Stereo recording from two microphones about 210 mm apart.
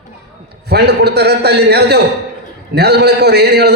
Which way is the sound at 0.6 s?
50° right (ahead or behind).